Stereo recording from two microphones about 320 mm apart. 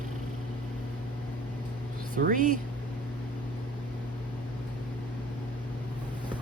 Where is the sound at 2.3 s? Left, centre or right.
Right.